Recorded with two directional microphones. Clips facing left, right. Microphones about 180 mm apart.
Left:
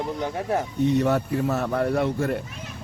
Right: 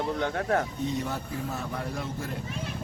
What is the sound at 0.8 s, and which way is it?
A man's voice, 65° left (ahead or behind).